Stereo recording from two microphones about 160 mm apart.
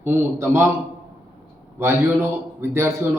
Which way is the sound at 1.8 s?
15° right (ahead or behind).